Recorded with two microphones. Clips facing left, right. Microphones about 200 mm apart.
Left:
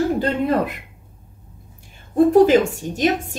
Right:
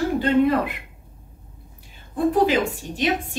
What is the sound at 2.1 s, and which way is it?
Speech, 45° left (ahead or behind).